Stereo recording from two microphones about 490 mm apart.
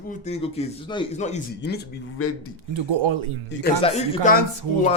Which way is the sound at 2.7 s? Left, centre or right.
Right.